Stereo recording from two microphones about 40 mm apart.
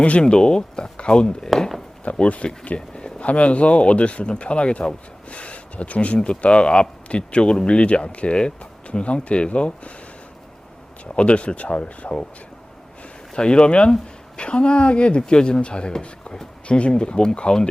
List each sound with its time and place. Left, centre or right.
0.2 s speech: left
2.6 s a sound: left
3.2 s speech: left
11.0 s speech: left
13.3 s speech: left